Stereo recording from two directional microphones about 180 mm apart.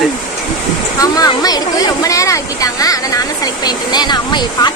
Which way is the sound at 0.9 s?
20° left (ahead or behind).